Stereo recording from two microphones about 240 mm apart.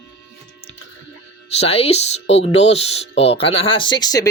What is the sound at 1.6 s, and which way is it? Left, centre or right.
Speech, left.